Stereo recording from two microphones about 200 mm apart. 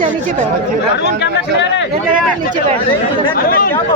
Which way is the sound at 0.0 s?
40° right (ahead or behind).